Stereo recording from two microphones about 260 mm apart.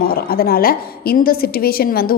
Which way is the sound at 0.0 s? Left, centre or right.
Left.